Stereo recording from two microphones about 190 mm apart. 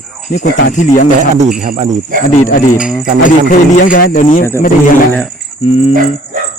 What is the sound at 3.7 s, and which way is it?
Speech, 45° left (ahead or behind).